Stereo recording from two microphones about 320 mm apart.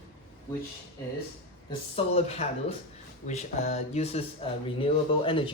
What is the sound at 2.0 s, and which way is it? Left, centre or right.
Speech, centre.